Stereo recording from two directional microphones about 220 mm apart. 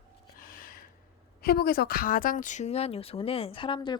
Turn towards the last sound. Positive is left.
turn(degrees=20)  # may be behind; listen again after turning